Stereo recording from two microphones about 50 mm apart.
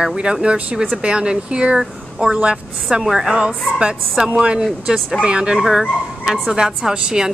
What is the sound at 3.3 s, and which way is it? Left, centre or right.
A woman's voice, centre.